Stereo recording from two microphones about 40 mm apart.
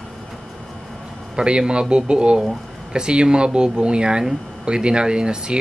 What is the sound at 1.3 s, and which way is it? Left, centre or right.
A man's voice, right.